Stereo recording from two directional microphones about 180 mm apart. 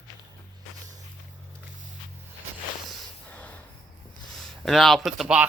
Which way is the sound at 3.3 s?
10° left (ahead or behind).